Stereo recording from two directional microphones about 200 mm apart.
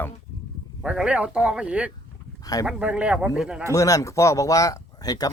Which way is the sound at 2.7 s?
5° right (ahead or behind).